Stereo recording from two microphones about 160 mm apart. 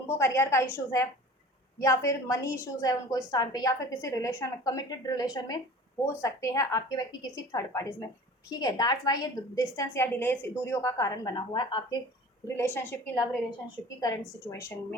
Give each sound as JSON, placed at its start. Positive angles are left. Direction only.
{"t": 0.1, "sound": "a woman's voice", "side_deg": 15}
{"t": 1.8, "sound": "a woman's voice", "side_deg": 20}
{"t": 12.5, "sound": "a woman's voice", "side_deg": 15}
{"t": 14.4, "sound": "a woman's voice", "side_deg": 15}